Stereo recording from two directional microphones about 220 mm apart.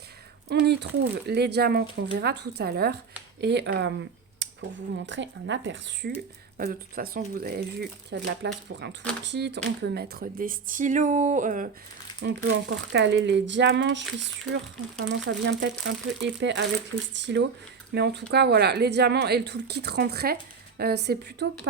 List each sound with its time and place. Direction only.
0.4 s speech: 50° right (ahead or behind)
12.2 s speech: 55° right (ahead or behind)